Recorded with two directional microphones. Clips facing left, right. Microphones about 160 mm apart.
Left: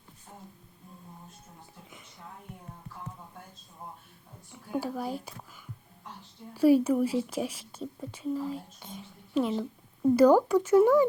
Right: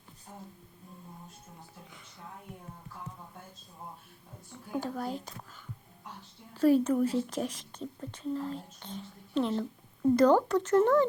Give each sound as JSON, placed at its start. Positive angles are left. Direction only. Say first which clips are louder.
{"t": 4.7, "sound": "speech", "louder": "left 2 dB", "side_deg": 10}
{"t": 6.5, "sound": "speech", "louder": "left 2 dB", "side_deg": 10}